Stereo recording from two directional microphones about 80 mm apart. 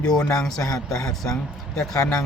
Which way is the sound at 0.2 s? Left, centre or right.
Centre.